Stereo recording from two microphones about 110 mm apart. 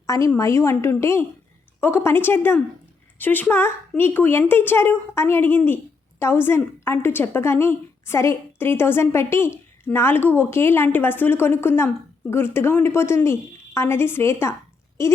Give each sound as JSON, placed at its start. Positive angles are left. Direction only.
{"t": 0.3, "sound": "a woman's voice", "side_deg": 25}